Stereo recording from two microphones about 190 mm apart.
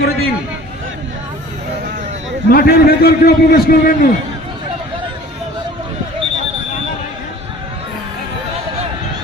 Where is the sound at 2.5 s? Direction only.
50° left (ahead or behind).